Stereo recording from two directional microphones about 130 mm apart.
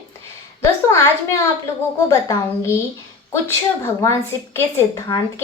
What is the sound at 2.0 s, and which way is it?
Speech, 25° left (ahead or behind).